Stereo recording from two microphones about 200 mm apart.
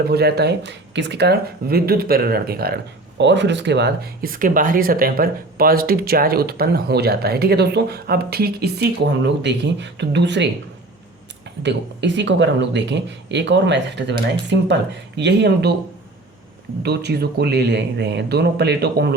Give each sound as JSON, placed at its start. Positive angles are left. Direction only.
{"t": 0.1, "sound": "speech", "side_deg": -55}
{"t": 11.6, "sound": "speech", "side_deg": -60}
{"t": 16.8, "sound": "speech", "side_deg": -55}